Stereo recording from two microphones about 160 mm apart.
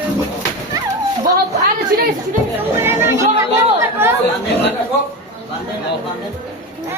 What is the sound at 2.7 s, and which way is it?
Speech, 15° right (ahead or behind).